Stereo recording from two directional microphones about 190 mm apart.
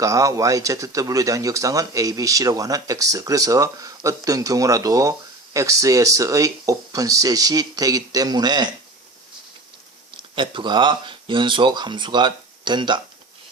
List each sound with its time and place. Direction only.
0.0 s speech: 15° right (ahead or behind)
10.3 s speech: 25° right (ahead or behind)